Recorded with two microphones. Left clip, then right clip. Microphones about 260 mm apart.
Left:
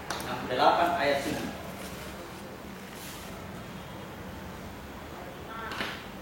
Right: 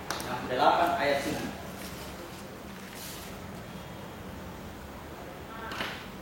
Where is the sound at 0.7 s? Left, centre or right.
Left.